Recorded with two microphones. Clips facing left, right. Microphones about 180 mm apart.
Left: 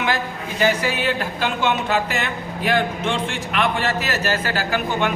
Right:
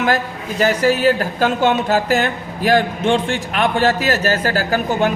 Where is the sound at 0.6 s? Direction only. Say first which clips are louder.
Right 6 dB; 40° right (ahead or behind).